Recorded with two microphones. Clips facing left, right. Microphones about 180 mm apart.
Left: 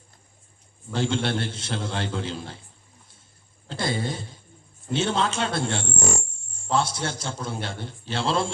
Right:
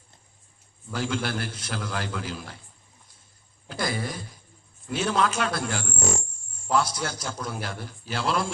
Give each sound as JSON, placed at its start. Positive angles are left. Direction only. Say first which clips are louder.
{"t": 0.9, "sound": "a man's voice", "louder": "left 3 dB", "side_deg": 25}
{"t": 3.7, "sound": "a man's voice", "louder": "left 2 dB", "side_deg": 25}